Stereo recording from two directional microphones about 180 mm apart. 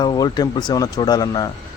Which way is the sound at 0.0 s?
25° left (ahead or behind).